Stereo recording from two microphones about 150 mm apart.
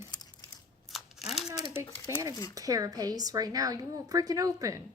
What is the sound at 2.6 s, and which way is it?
A woman's voice, 25° right (ahead or behind).